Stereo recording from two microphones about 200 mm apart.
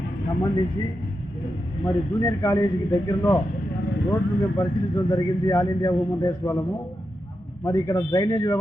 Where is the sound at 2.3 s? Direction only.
15° left (ahead or behind).